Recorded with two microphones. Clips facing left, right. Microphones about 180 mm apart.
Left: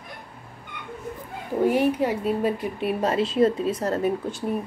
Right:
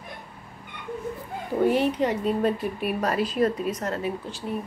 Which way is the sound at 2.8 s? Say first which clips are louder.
Left 3 dB; 25° left (ahead or behind).